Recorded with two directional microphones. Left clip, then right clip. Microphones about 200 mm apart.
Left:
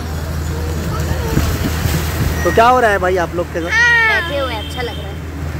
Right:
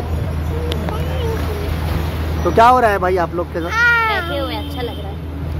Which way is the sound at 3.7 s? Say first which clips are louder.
Left 3 dB; 25° right (ahead or behind).